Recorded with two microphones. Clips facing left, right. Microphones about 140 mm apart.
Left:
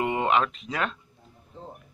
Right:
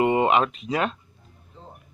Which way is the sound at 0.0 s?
15° right (ahead or behind).